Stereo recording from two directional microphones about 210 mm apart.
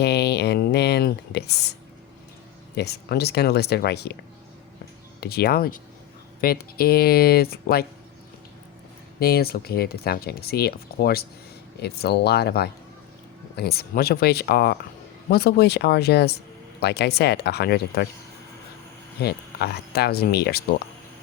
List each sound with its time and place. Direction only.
0.0 s a sound: 50° left (ahead or behind)
2.7 s speech: 50° left (ahead or behind)
5.2 s speech: 50° left (ahead or behind)
9.1 s speech: 45° left (ahead or behind)
19.2 s speech: 50° left (ahead or behind)